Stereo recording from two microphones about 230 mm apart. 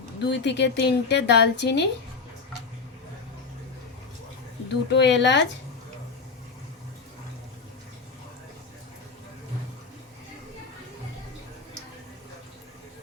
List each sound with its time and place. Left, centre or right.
0.2 s a woman's voice: left
4.9 s a woman's voice: left